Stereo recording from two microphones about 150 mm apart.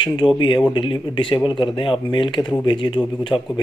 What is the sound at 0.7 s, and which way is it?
Speech, 35° left (ahead or behind).